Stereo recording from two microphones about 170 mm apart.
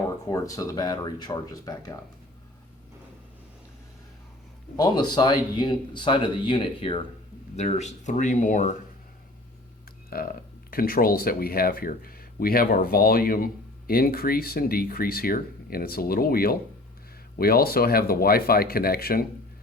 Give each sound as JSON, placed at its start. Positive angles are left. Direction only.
{"t": 0.3, "sound": "speech", "side_deg": 20}
{"t": 4.8, "sound": "speech", "side_deg": 25}
{"t": 7.5, "sound": "speech", "side_deg": 40}
{"t": 10.1, "sound": "speech", "side_deg": 60}